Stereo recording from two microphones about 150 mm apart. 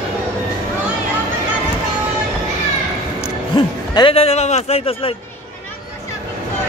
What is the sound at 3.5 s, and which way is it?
Music, 30° left (ahead or behind).